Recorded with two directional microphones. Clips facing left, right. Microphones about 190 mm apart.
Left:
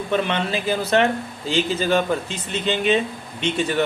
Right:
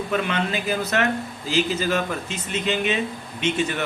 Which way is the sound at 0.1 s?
30° left (ahead or behind).